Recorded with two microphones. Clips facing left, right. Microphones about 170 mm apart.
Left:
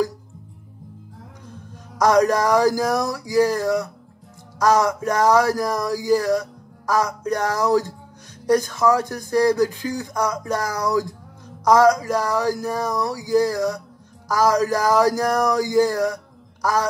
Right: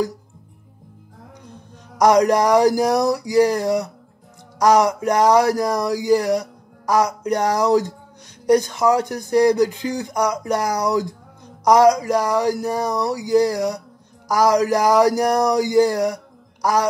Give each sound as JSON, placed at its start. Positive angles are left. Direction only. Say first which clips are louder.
{"t": 2.0, "sound": "speech", "louder": "right 2 dB", "side_deg": -20}